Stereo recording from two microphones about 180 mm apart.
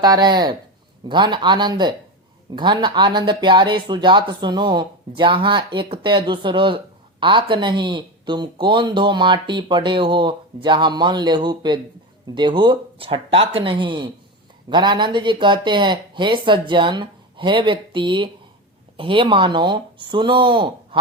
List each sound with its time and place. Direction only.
0.0 s speech: 20° right (ahead or behind)